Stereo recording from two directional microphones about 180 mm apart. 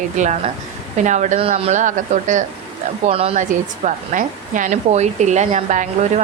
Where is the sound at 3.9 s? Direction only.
45° right (ahead or behind).